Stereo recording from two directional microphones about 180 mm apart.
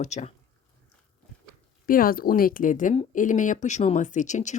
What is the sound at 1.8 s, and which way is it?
Speech, 50° left (ahead or behind).